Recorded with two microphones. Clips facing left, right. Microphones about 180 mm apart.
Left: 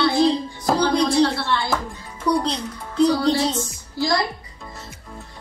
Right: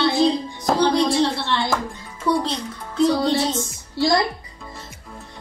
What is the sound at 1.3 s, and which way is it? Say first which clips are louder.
Speech: even; 20° right (ahead or behind).